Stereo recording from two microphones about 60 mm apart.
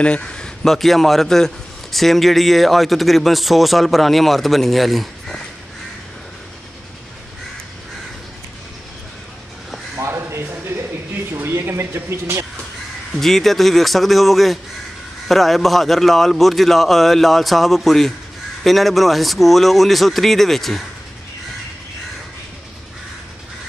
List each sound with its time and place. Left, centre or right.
0.0 s speech: centre
0.7 s a man's voice: centre
9.9 s a sound: right
13.2 s a man's voice: centre